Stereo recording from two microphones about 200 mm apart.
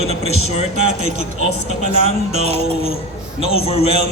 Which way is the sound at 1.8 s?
30° left (ahead or behind).